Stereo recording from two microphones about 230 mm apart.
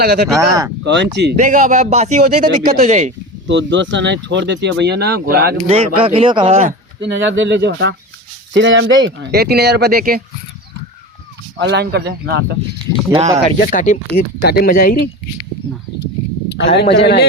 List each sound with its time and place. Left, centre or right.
0.0 s speech: right
0.3 s speech: centre
0.9 s speech: right
1.5 s speech: right
3.4 s speech: right
5.6 s speech: right
7.0 s speech: right
11.5 s speech: right
13.6 s speech: left
16.5 s a man's voice: left